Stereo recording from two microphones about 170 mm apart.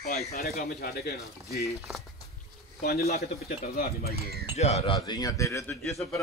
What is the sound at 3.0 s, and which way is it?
Speech, 40° left (ahead or behind).